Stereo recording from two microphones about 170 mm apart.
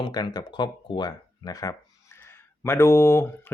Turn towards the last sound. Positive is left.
turn(degrees=15)  # may be behind; listen again after turning